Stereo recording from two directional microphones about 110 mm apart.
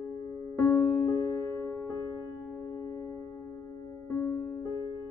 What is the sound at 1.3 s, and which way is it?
Music, 30° left (ahead or behind).